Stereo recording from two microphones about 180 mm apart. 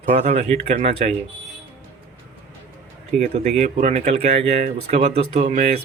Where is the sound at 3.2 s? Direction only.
40° right (ahead or behind).